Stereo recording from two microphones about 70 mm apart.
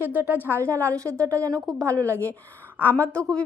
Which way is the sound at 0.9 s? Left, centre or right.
Right.